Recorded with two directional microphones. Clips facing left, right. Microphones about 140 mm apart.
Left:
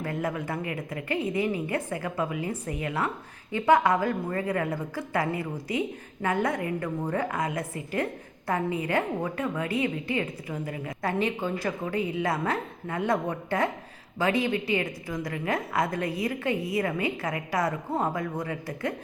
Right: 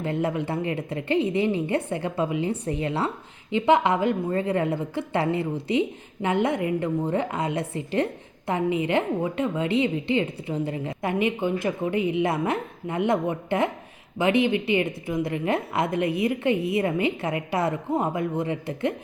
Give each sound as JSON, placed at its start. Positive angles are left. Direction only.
{"t": 0.0, "sound": "a woman's voice", "side_deg": -25}